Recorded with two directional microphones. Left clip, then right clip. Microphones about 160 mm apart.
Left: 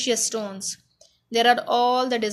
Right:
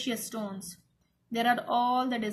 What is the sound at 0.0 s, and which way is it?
Speech, 35° left (ahead or behind).